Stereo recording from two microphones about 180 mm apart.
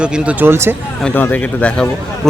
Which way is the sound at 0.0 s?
10° right (ahead or behind).